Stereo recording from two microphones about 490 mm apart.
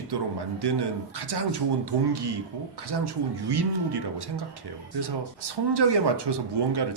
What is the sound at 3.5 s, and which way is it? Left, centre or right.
Speech, right.